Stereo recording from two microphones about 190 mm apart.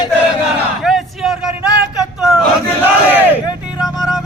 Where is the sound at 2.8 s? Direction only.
10° right (ahead or behind).